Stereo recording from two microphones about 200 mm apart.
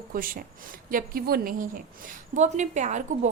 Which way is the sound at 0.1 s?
45° right (ahead or behind).